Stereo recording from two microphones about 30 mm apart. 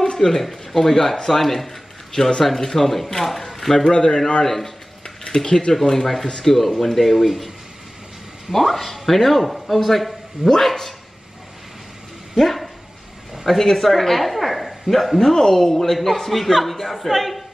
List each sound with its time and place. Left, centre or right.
0.0 s a sound: left
0.4 s speech: centre
1.4 s a sound: centre
2.4 s speech: centre
3.7 s speech: left
4.5 s speech: centre
5.0 s a sound: centre
5.8 s speech: centre
8.5 s a man's voice: centre
12.4 s speech: centre
15.2 s speech: centre